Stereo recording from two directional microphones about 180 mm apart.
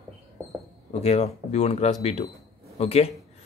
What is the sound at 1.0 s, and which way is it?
Speech, 35° left (ahead or behind).